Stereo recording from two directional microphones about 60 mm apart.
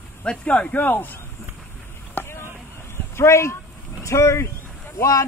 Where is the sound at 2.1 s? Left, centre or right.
Left.